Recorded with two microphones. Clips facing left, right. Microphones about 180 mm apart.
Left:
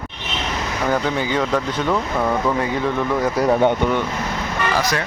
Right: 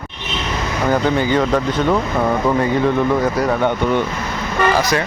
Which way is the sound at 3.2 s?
20° left (ahead or behind).